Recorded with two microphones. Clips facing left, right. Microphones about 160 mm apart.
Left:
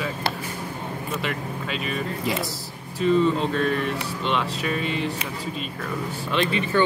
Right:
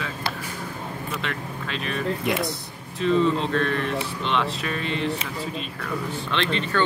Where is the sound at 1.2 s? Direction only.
5° left (ahead or behind).